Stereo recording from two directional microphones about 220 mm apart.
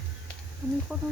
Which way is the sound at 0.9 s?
5° right (ahead or behind).